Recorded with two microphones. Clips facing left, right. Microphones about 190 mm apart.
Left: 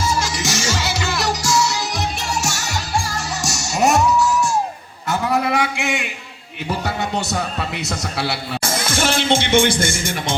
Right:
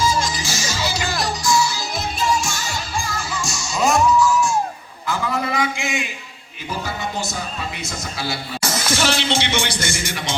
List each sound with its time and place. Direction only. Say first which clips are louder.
0.0 s music: even; 65° left (ahead or behind)
5.0 s a sound: left 4 dB; 65° left (ahead or behind)
6.7 s speech: left 4 dB; 70° left (ahead or behind); by 10.3 s 50° left (ahead or behind)